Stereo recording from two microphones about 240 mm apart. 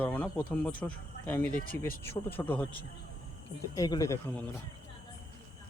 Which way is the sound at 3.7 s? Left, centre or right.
Centre.